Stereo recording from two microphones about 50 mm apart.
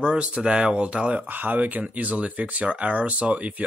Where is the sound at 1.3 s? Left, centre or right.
Right.